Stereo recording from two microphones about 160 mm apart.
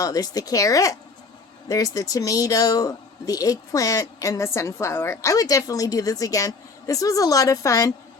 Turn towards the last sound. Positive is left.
turn(degrees=20)  # may be behind; listen again after turning